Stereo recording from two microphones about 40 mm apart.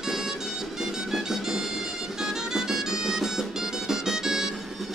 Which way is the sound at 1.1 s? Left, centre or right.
Centre.